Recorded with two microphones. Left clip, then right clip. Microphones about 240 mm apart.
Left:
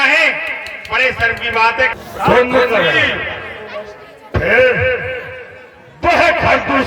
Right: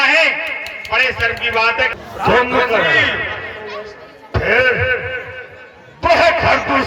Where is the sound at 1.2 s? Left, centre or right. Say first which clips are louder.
Left 2 dB; right.